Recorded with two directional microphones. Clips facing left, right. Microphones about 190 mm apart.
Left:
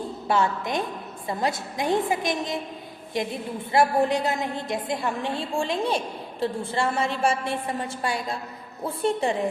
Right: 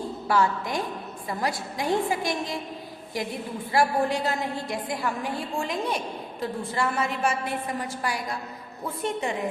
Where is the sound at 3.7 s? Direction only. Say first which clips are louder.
Left 3 dB; 20° left (ahead or behind).